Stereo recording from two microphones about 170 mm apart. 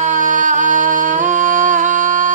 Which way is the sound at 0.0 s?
50° right (ahead or behind).